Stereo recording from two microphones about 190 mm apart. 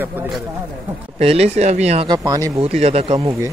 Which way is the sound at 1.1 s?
30° right (ahead or behind).